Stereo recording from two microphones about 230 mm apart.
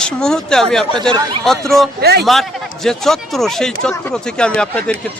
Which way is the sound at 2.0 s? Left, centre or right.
Right.